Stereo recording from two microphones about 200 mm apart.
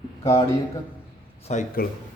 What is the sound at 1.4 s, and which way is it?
Speech, 40° left (ahead or behind).